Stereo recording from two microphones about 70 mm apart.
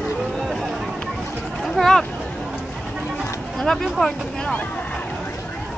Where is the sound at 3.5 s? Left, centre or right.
Centre.